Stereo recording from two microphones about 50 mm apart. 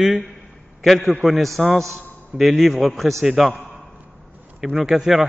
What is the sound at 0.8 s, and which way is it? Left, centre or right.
A man's voice, centre.